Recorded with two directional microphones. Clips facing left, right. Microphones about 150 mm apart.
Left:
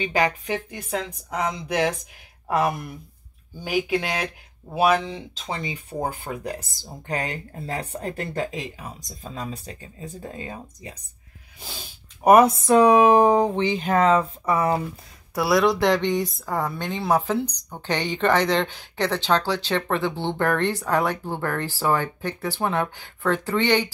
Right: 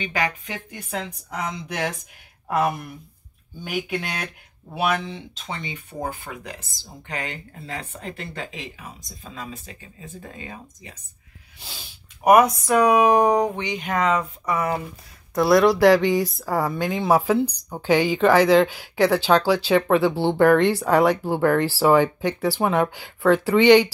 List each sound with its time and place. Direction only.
0.0 s speech: 35° left (ahead or behind)
4.7 s speech: 35° left (ahead or behind)
12.3 s speech: 30° left (ahead or behind)
15.3 s speech: centre (ahead or behind)